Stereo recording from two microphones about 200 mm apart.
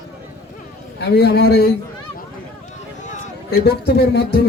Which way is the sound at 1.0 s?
55° left (ahead or behind).